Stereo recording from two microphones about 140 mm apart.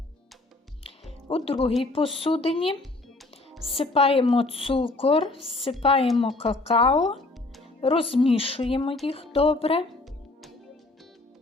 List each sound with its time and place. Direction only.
1.5 s speech: 40° left (ahead or behind)
3.5 s music: centre (ahead or behind)
3.8 s speech: 45° left (ahead or behind)